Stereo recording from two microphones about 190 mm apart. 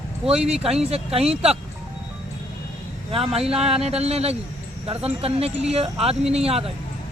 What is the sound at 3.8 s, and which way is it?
Speech, 35° right (ahead or behind).